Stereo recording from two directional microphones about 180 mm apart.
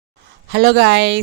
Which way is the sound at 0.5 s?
65° right (ahead or behind).